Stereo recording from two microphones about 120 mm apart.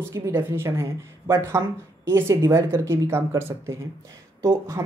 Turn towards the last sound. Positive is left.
turn(degrees=-25)  # may be behind; listen again after turning